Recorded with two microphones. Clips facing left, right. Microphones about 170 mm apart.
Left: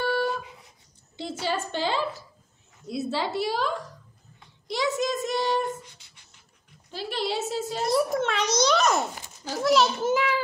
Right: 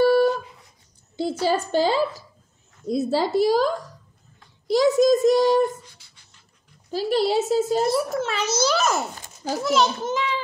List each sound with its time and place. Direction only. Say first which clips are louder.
0.0 s a sound: right 10 dB; 40° right (ahead or behind)
1.1 s a woman's voice: right 7 dB; 40° right (ahead or behind)
6.9 s a woman's voice: right 9 dB; 40° right (ahead or behind)
7.8 s a child's voice: right 1 dB; centre (ahead or behind)